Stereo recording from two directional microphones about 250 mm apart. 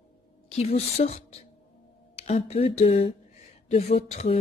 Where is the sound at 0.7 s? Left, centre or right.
Left.